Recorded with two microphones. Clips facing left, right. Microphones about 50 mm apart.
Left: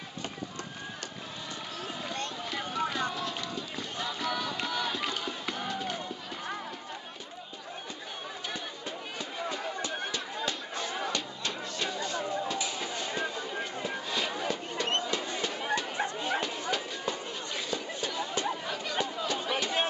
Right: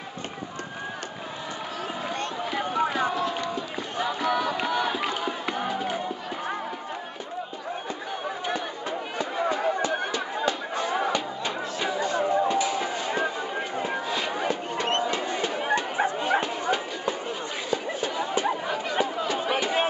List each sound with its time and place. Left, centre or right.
2.5 s crowd: centre
9.2 s a sound: right
9.8 s run: centre
10.4 s music: centre
12.2 s a sound: right
12.5 s music: right
14.0 s music: centre
14.3 s bow-wow: right
17.6 s a sound: centre
18.7 s chatter: right